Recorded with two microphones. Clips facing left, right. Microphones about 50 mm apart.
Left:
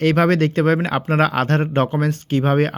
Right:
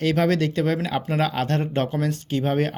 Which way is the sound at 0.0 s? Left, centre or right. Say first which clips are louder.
Left 5 dB; left.